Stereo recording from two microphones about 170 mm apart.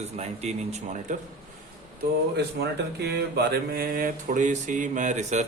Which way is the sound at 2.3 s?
75° right (ahead or behind).